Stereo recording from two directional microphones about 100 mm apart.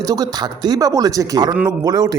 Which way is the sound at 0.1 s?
40° right (ahead or behind).